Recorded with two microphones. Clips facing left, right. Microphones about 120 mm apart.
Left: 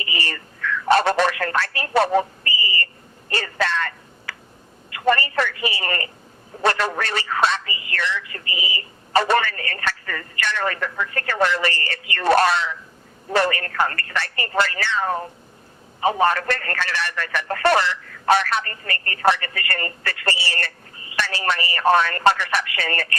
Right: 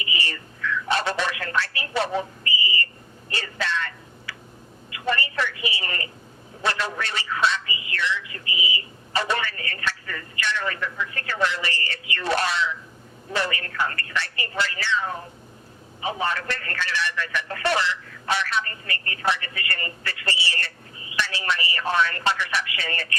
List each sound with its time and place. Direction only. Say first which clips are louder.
0.0 s telephone: left 2 dB; 50° left (ahead or behind)
3.2 s a sound: left 5 dB; 50° left (ahead or behind)
4.9 s a man's voice: left 7 dB; 50° left (ahead or behind)